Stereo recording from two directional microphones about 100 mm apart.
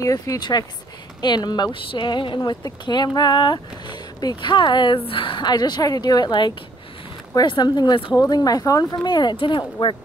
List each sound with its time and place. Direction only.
0.0 s speech: 35° left (ahead or behind); by 9.9 s 55° left (ahead or behind)